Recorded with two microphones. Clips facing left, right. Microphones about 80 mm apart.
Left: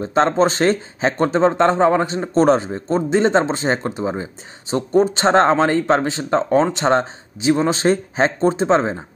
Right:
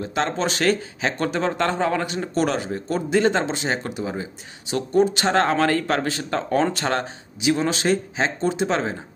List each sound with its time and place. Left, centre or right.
0.0 s speech: left